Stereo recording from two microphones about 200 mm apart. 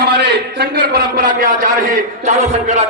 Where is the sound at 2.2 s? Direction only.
35° right (ahead or behind).